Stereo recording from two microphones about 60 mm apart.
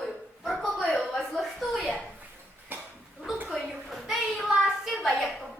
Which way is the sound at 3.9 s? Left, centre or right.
Centre.